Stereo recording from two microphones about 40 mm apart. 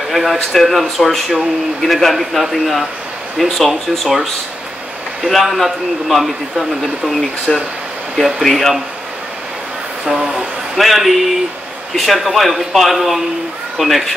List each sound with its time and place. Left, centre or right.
0.1 s speech: centre
10.1 s a sound: right
10.8 s a man's voice: centre